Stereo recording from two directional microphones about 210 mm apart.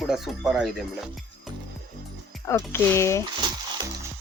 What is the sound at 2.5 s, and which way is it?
Speech, 10° left (ahead or behind).